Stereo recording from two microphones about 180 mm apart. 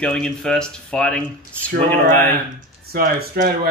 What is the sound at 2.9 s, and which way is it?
Speech, 55° right (ahead or behind).